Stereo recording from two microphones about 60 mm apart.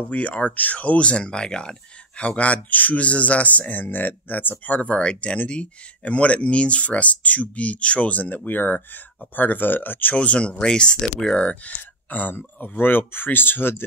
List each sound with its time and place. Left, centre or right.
0.1 s speech: left
10.1 s speech: left
11.6 s speech: left